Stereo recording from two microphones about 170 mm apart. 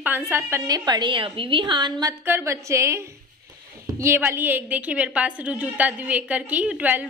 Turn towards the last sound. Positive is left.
turn(degrees=-10)  # may be behind; listen again after turning